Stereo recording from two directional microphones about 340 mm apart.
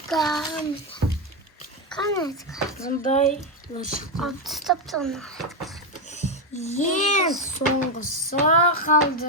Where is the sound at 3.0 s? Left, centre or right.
Left.